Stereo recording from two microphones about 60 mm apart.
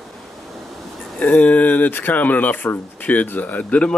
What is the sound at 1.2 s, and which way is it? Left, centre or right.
Speech, left.